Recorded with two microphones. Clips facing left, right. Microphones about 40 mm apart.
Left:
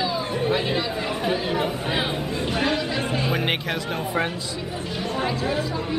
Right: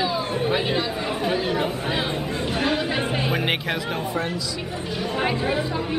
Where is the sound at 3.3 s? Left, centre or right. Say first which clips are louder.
Right 1 dB; centre.